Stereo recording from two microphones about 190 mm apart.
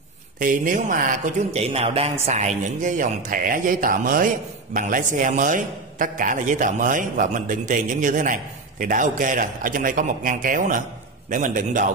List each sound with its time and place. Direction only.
0.4 s a man's voice: 45° right (ahead or behind)